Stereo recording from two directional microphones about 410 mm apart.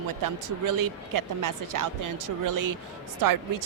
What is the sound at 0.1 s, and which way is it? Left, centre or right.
A woman's voice, right.